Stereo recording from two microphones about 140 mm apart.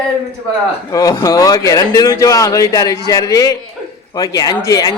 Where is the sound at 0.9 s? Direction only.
25° left (ahead or behind).